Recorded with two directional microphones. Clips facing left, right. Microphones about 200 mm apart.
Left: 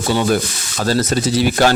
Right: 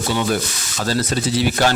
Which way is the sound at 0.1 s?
45° left (ahead or behind).